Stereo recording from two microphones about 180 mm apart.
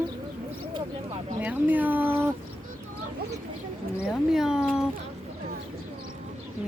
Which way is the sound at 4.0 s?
5° right (ahead or behind).